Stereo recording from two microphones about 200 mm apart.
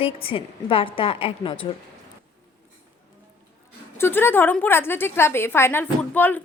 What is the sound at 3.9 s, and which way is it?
A woman's voice, 10° left (ahead or behind).